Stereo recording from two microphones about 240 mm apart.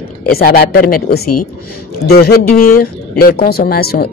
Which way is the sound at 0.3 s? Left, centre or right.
Left.